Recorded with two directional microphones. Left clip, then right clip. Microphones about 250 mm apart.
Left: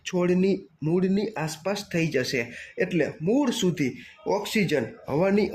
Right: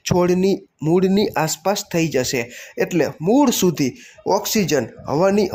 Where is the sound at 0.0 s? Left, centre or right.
Centre.